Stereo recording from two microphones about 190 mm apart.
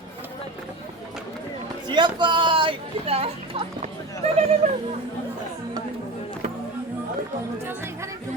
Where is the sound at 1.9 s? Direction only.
25° right (ahead or behind); by 4.8 s 40° right (ahead or behind).